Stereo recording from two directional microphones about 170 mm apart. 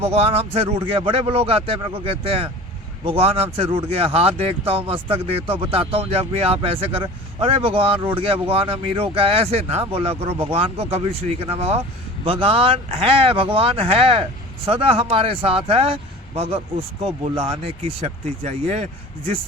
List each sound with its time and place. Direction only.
0.0 s speech: 35° right (ahead or behind)
18.0 s speech: 40° right (ahead or behind)